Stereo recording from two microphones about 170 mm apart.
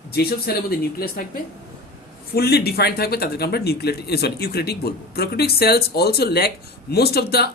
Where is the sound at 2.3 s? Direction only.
70° left (ahead or behind).